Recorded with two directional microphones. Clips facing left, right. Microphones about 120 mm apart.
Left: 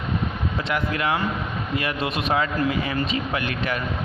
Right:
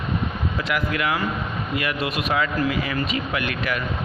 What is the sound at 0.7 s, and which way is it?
Speech, 30° left (ahead or behind).